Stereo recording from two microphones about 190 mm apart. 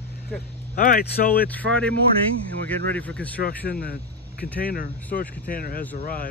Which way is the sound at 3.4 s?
55° left (ahead or behind).